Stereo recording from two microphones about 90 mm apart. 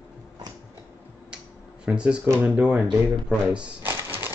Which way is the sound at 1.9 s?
10° right (ahead or behind).